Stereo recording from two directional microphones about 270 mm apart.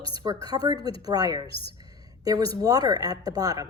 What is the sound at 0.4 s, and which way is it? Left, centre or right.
A woman's voice, centre.